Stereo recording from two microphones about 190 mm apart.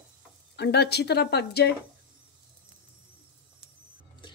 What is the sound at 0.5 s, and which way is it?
A woman's voice, 60° left (ahead or behind).